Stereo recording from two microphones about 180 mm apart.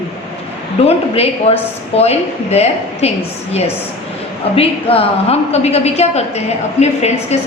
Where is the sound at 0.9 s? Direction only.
35° left (ahead or behind).